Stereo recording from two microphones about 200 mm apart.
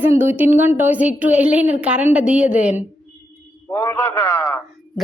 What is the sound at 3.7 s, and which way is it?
Speech, 15° left (ahead or behind).